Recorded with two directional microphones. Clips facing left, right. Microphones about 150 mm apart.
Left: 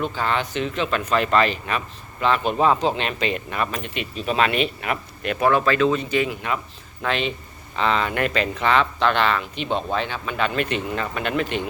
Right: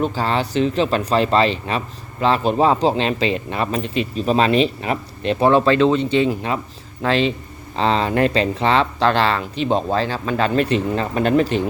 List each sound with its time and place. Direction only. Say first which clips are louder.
0.0 s speech: right 4 dB; 35° right (ahead or behind)